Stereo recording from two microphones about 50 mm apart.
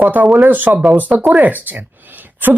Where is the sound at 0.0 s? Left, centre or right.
Right.